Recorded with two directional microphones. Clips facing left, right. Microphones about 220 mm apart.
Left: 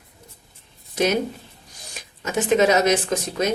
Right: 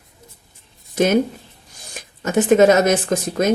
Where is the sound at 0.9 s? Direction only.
50° right (ahead or behind).